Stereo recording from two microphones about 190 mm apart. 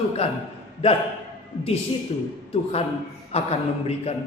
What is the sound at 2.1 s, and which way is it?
Speech, 30° left (ahead or behind).